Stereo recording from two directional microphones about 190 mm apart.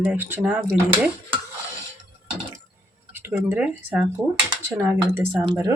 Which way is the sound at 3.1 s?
15° right (ahead or behind).